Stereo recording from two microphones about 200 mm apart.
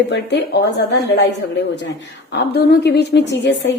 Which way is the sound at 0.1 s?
60° left (ahead or behind).